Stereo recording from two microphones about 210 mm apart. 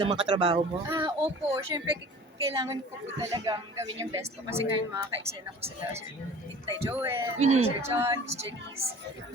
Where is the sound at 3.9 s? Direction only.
15° right (ahead or behind).